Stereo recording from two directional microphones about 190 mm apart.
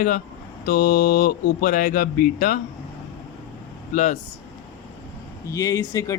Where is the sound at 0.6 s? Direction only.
55° left (ahead or behind).